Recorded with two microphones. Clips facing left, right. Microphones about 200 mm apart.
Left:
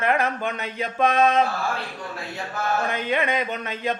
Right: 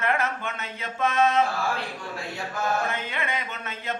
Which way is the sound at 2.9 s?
15° left (ahead or behind).